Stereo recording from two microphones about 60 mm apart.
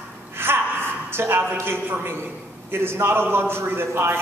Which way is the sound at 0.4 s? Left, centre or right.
Right.